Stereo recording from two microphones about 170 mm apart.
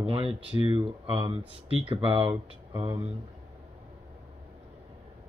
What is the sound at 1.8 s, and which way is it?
Speech, 30° right (ahead or behind).